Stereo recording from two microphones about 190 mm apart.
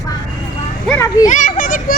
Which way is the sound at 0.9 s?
15° left (ahead or behind).